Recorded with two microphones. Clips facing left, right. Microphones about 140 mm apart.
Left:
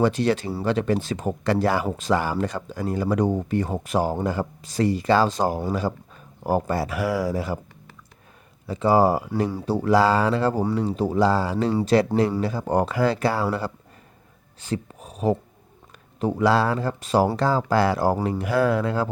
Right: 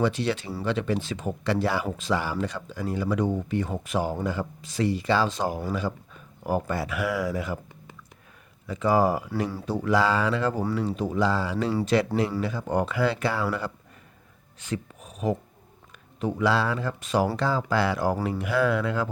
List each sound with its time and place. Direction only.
0.0 s speech: 45° left (ahead or behind)
8.6 s speech: 30° left (ahead or behind)